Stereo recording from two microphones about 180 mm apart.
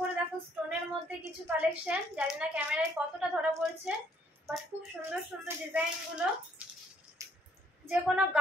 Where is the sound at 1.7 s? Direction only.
5° right (ahead or behind).